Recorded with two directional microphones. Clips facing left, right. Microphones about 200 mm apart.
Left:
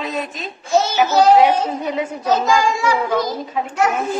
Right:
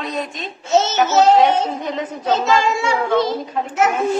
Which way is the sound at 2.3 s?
25° right (ahead or behind).